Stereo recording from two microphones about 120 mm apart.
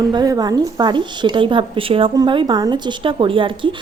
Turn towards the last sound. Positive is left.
turn(degrees=-45)  # may be behind; listen again after turning